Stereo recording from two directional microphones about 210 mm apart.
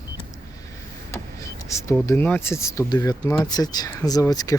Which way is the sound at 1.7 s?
15° left (ahead or behind).